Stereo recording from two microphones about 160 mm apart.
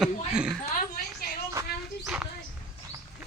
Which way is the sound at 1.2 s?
70° left (ahead or behind).